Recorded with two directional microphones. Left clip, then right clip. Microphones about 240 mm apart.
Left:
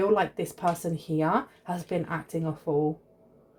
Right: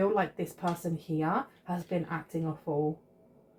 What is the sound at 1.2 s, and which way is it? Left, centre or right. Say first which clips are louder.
Speech: left 5 dB; left.